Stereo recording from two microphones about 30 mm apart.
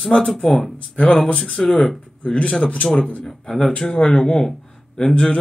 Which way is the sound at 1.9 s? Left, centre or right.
Left.